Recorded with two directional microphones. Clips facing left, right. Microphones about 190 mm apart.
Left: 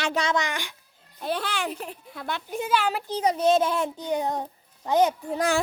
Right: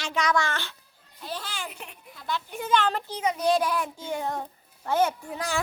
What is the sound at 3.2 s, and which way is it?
A child's voice, 30° left (ahead or behind).